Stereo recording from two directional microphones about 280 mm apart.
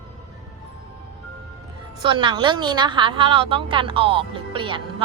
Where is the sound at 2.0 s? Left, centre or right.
Centre.